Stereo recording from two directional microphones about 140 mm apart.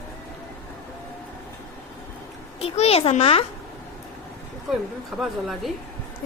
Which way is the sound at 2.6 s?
45° left (ahead or behind).